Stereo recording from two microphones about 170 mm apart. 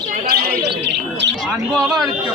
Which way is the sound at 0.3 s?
65° right (ahead or behind).